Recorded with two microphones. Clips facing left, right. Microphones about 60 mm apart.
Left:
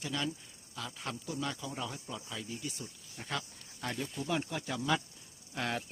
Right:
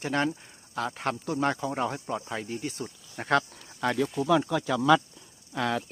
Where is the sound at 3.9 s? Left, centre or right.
Right.